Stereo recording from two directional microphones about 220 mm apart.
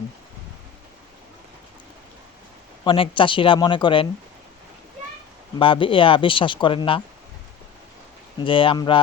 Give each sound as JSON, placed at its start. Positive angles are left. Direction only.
{"t": 2.8, "sound": "speech", "side_deg": 25}
{"t": 5.5, "sound": "speech", "side_deg": 25}
{"t": 8.4, "sound": "speech", "side_deg": 25}